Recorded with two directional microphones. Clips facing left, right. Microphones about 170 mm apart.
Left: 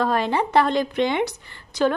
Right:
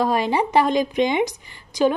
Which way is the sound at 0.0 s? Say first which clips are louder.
Right 1 dB; 10° right (ahead or behind).